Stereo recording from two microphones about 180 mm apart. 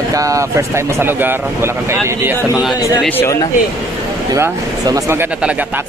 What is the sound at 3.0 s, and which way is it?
Speech, 10° left (ahead or behind).